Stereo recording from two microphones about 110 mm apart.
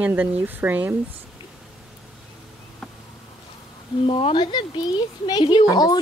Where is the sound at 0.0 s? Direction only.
15° right (ahead or behind).